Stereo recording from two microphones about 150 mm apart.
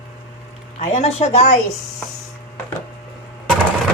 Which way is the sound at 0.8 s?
55° left (ahead or behind).